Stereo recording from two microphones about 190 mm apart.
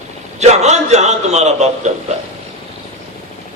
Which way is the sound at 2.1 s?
35° right (ahead or behind).